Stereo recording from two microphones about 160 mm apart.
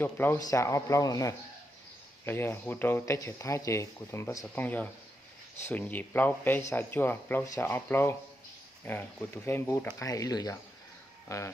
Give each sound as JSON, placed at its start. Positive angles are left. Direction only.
{"t": 0.0, "sound": "speech", "side_deg": 15}